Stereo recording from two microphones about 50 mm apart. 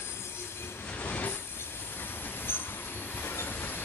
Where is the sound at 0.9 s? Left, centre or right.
Left.